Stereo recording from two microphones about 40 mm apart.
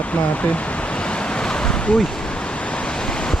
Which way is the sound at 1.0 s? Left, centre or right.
Left.